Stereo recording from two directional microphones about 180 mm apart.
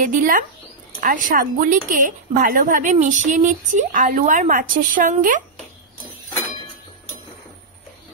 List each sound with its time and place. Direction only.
0.0 s a woman's voice: 50° right (ahead or behind)